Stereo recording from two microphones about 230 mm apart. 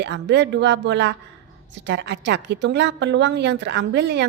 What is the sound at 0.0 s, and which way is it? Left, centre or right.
A woman's voice, right.